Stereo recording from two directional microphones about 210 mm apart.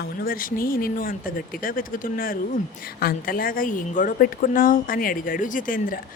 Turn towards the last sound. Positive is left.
turn(degrees=40)  # may be behind; listen again after turning